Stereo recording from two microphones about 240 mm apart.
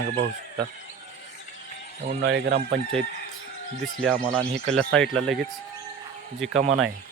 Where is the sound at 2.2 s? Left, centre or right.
Right.